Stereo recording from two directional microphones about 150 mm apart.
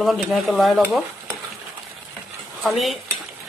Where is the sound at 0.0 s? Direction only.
Centre (ahead or behind).